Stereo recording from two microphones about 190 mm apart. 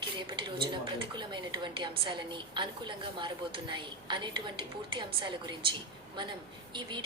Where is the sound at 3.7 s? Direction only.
25° right (ahead or behind).